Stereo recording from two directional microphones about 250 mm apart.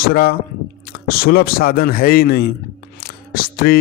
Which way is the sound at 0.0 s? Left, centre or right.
Left.